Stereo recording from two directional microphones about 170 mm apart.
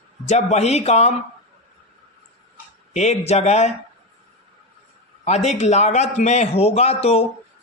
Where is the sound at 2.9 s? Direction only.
40° left (ahead or behind).